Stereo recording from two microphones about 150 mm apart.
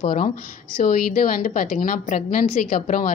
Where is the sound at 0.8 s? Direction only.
65° left (ahead or behind).